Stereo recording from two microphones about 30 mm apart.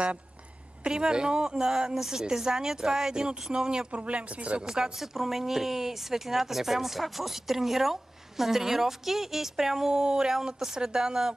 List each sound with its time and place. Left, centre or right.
0.8 s speech: right
2.0 s speech: centre
3.9 s speech: right
4.6 s speech: right
4.9 s speech: centre
9.8 s speech: right